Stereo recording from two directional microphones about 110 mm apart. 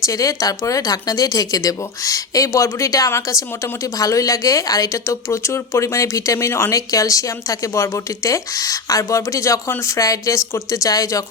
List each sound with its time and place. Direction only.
0.0 s speech: 30° left (ahead or behind)